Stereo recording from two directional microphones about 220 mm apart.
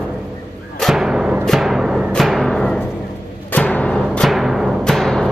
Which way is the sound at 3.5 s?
5° left (ahead or behind).